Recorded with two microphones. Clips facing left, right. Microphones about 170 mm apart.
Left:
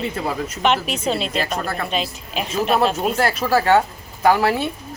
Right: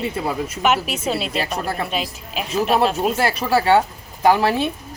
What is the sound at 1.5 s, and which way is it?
Speech, 15° right (ahead or behind).